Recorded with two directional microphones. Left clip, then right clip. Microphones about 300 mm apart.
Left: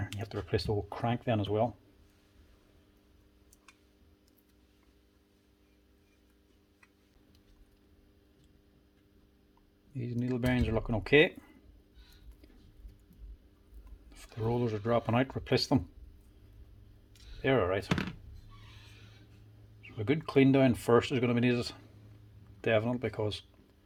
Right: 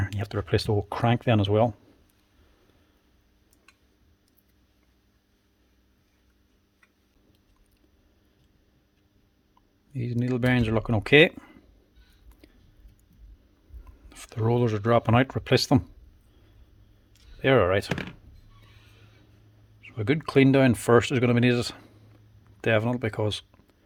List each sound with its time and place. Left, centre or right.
0.2 s speech: right
9.9 s speech: right
12.4 s a sound: right
14.1 s speech: right
17.4 s speech: right
19.8 s speech: right